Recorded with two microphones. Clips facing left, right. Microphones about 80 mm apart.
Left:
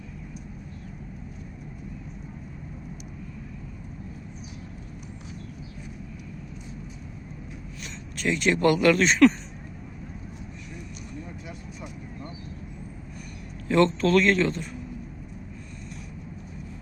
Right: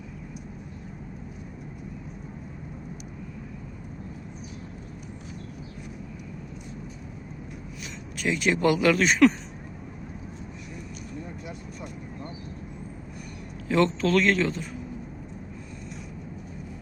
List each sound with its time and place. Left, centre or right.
7.8 s speech: centre
13.7 s a man's voice: centre